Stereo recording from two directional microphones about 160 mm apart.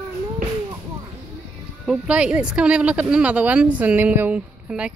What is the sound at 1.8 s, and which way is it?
A woman's voice, 5° right (ahead or behind).